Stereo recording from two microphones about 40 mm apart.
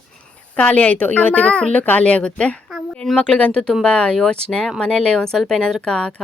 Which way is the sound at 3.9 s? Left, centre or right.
Left.